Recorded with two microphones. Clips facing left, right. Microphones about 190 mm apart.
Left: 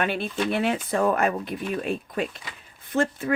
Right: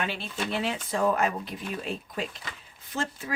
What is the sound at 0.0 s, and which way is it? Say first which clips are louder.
Speech: left 6 dB; 55° left (ahead or behind).